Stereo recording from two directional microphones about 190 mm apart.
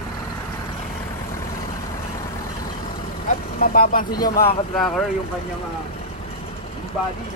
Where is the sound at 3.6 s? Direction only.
50° left (ahead or behind).